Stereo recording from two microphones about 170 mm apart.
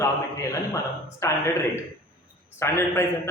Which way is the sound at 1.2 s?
15° left (ahead or behind).